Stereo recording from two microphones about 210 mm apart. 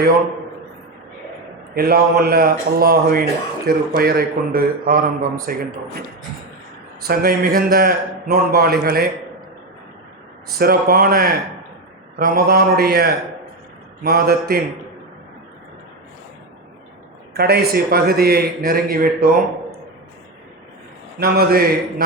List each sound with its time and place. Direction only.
1.7 s a man's voice: 45° right (ahead or behind)
7.1 s a man's voice: 45° right (ahead or behind)
10.6 s a man's voice: 45° right (ahead or behind)
17.3 s a man's voice: 50° right (ahead or behind)
21.2 s a man's voice: 45° right (ahead or behind)